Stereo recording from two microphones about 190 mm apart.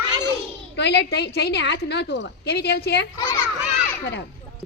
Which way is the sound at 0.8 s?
60° left (ahead or behind).